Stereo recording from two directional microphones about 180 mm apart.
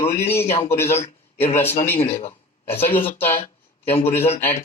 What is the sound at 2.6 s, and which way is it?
Speech, 15° left (ahead or behind).